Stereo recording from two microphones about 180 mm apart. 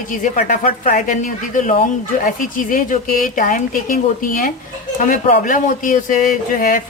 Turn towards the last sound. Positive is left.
turn(degrees=50)  # may be behind; listen again after turning